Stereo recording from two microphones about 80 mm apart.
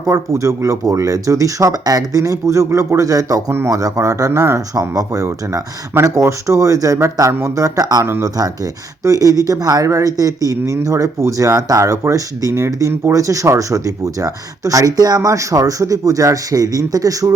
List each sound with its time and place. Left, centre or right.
0.1 s speech: right